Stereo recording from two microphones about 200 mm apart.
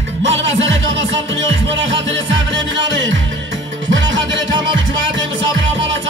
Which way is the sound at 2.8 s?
65° right (ahead or behind).